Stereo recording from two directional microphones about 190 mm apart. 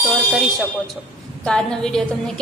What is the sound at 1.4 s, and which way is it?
A woman's voice, 5° left (ahead or behind).